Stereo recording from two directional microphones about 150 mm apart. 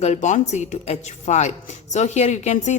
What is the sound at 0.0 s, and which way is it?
A woman's voice, 50° left (ahead or behind).